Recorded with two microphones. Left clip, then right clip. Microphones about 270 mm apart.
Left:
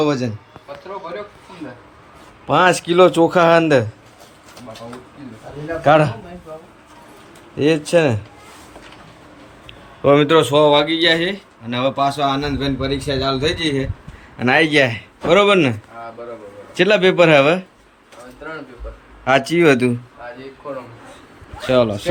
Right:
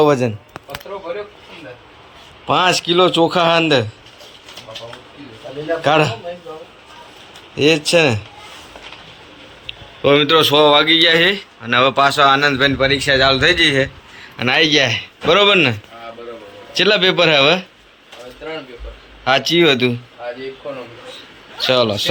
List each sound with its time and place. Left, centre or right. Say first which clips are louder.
0.0 s a man's voice: right 5 dB; centre
2.5 s speech: even; centre
5.8 s speech: left 2 dB; centre
7.5 s speech: right 2 dB; centre
9.6 s a man's voice: even; centre
16.7 s speech: even; centre
19.2 s speech: right 1 dB; centre
21.7 s speech: right 1 dB; centre